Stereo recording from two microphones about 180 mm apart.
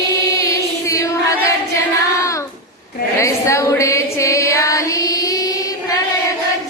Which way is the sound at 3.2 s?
15° left (ahead or behind).